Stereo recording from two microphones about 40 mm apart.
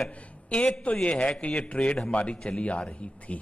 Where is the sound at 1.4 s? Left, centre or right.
Left.